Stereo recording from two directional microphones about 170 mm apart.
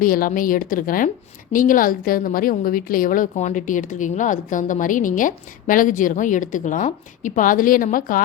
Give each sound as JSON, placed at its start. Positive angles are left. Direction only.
{"t": 0.0, "sound": "a woman's voice", "side_deg": 55}